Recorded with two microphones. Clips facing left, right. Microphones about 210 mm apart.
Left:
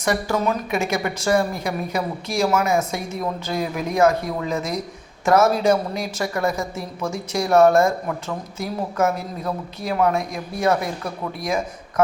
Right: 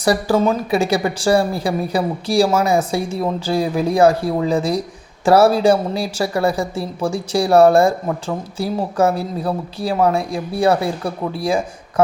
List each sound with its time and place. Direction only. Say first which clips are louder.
0.0 s speech: right 6 dB; 35° right (ahead or behind)